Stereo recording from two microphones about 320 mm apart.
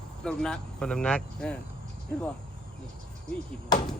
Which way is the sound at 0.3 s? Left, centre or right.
Centre.